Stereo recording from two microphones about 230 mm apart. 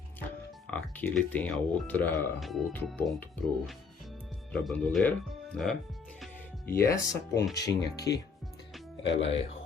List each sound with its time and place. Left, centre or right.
0.7 s speech: centre
6.7 s speech: centre